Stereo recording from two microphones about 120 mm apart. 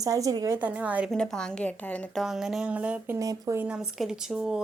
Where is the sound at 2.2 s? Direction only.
5° right (ahead or behind).